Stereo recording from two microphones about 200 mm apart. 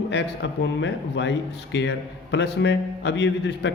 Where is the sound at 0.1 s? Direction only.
60° left (ahead or behind).